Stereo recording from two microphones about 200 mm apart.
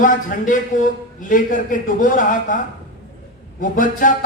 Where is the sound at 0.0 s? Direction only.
40° left (ahead or behind).